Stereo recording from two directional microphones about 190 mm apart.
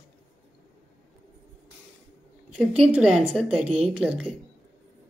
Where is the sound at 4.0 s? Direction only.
5° right (ahead or behind).